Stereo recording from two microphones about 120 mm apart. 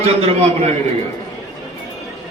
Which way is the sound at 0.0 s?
55° right (ahead or behind).